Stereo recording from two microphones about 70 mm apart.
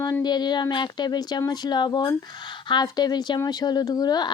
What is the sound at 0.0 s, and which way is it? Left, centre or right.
Speech, left.